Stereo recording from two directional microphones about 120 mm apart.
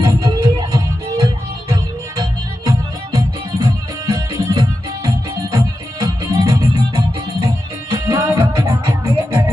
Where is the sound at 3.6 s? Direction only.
30° right (ahead or behind).